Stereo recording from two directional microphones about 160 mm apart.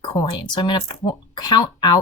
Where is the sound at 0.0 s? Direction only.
25° left (ahead or behind).